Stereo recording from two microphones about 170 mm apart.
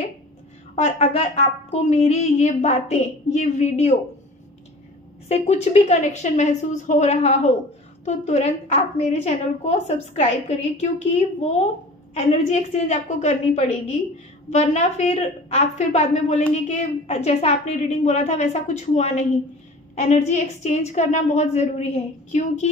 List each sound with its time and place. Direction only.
0.7 s a woman's voice: 40° left (ahead or behind)
5.3 s a woman's voice: 40° left (ahead or behind)
11.4 s a woman's voice: 40° left (ahead or behind)